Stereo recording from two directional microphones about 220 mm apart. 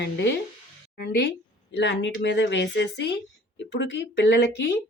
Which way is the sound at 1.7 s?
55° left (ahead or behind).